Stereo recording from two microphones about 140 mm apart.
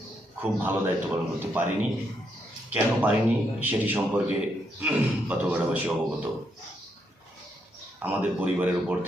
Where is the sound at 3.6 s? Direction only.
15° right (ahead or behind).